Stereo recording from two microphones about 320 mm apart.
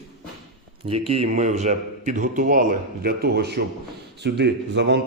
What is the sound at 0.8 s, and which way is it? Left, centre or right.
A man's voice, centre.